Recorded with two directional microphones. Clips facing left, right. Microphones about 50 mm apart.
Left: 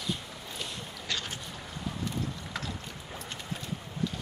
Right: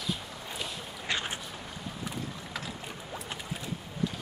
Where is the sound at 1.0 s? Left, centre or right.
Right.